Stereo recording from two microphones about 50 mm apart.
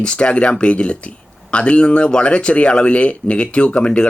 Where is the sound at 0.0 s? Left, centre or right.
Left.